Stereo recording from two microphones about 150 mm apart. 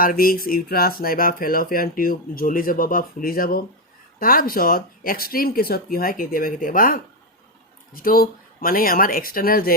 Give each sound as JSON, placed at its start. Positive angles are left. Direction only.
{"t": 0.0, "sound": "speech", "side_deg": 70}